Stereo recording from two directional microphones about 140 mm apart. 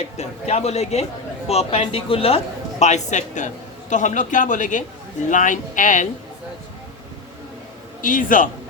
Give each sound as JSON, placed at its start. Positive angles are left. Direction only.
{"t": 0.2, "sound": "a man's voice", "side_deg": 50}
{"t": 8.0, "sound": "speech", "side_deg": 75}